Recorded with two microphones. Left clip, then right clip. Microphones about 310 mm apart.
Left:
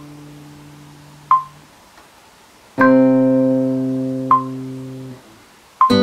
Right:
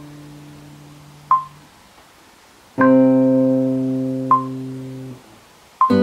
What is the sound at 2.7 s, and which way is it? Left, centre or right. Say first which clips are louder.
Keyboard: left 1 dB; centre.